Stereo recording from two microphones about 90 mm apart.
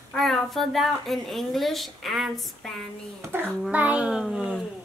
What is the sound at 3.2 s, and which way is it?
A child's voice, 25° right (ahead or behind).